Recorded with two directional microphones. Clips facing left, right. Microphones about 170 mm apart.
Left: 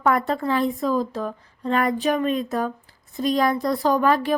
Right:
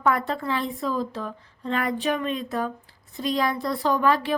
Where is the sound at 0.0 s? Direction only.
45° left (ahead or behind).